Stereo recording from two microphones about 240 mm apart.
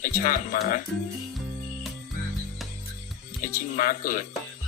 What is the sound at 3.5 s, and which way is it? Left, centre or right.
Speech, left.